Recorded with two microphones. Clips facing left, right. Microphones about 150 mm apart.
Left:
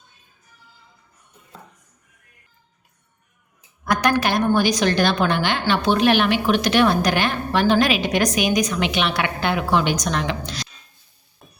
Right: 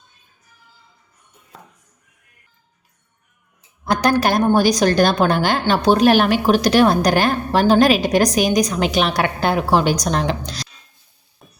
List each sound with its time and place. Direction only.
3.8 s a woman's voice: 35° right (ahead or behind)